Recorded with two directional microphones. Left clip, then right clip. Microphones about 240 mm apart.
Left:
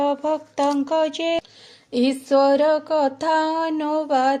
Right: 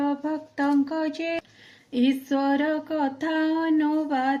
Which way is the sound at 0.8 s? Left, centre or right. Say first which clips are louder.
Left 7 dB; left.